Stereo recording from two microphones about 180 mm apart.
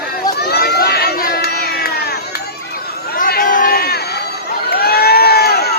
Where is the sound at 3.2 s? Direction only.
50° left (ahead or behind).